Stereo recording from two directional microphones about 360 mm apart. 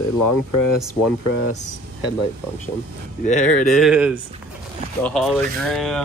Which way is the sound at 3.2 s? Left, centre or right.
Centre.